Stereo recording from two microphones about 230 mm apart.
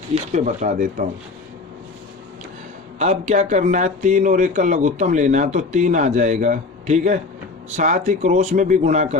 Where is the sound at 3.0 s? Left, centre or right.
Right.